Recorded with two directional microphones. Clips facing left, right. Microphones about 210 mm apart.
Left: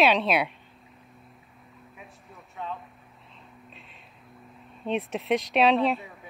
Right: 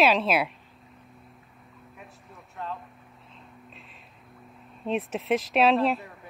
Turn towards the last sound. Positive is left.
turn(degrees=0)  # may be behind; listen again after turning